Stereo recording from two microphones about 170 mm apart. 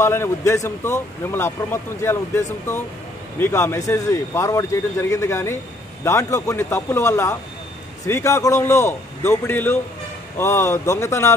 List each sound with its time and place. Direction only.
0.0 s speech: 15° left (ahead or behind)